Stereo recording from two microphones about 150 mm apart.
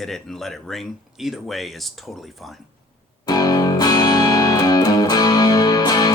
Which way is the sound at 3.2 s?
25° left (ahead or behind).